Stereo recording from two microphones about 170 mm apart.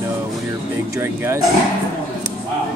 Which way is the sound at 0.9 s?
15° right (ahead or behind).